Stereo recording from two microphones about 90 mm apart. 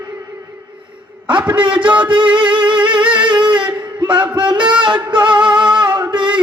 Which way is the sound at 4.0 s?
60° right (ahead or behind).